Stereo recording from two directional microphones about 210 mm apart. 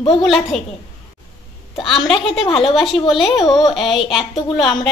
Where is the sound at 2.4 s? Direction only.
25° left (ahead or behind).